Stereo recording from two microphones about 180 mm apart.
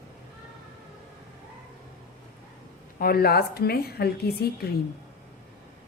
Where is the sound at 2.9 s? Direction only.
55° left (ahead or behind).